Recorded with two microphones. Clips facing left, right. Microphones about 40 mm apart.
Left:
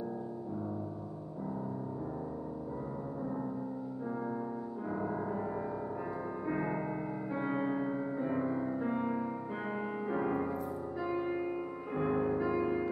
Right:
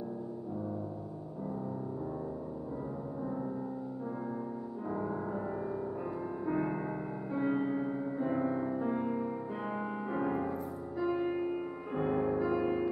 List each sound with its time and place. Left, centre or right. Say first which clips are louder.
4.9 s music: even; centre
6.4 s music: right 2 dB; centre
8.2 s music: right 3 dB; centre
8.7 s music: right 1 dB; centre